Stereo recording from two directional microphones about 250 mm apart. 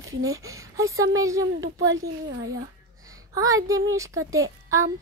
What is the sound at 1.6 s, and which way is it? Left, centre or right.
Speech, right.